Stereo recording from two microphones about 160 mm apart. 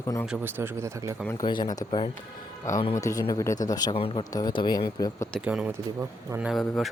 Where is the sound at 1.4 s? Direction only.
25° left (ahead or behind).